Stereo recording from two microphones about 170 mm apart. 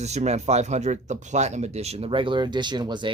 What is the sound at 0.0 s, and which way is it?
Speech, 40° right (ahead or behind).